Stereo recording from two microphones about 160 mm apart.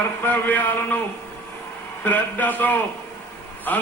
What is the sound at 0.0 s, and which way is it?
A man's voice, 10° left (ahead or behind).